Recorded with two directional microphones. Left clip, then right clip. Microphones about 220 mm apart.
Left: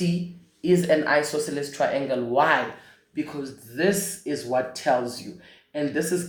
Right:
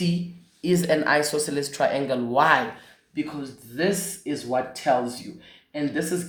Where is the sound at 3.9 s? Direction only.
25° right (ahead or behind).